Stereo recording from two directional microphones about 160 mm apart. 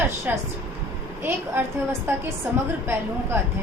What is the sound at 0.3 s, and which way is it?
Speech, 10° right (ahead or behind).